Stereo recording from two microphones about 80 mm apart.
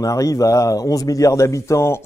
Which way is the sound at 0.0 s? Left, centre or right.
Left.